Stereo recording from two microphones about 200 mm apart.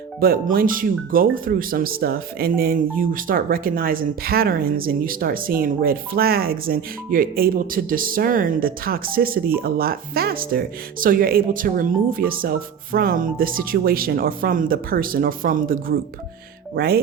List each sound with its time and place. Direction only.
0.2 s speech: 45° right (ahead or behind)